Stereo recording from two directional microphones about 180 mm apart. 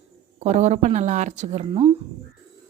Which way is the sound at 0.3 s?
40° right (ahead or behind).